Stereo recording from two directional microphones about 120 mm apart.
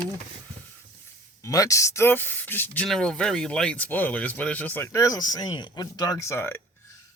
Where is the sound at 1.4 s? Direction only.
30° left (ahead or behind).